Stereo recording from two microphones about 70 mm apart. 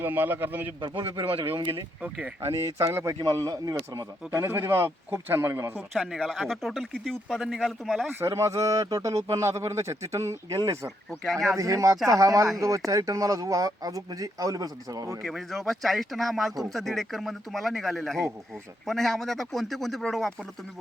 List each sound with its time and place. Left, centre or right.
0.0 s a man's voice: right
2.0 s speech: centre
2.4 s speech: right
4.3 s speech: right
5.9 s a man's voice: centre
7.4 s a man's voice: centre
8.2 s speech: right
11.2 s a man's voice: centre
11.5 s speech: right
15.2 s a man's voice: centre